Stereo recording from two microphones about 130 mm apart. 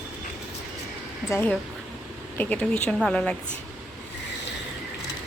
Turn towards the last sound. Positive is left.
turn(degrees=5)  # may be behind; listen again after turning